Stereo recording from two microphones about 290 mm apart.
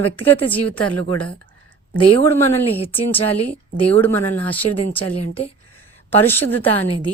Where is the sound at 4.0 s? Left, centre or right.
Centre.